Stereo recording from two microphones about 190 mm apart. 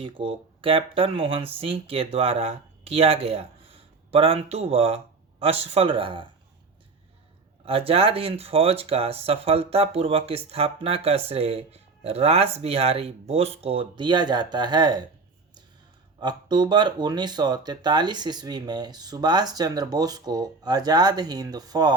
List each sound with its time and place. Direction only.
0.0 s speech: 30° right (ahead or behind)
7.6 s speech: 30° right (ahead or behind)
16.2 s speech: 20° right (ahead or behind)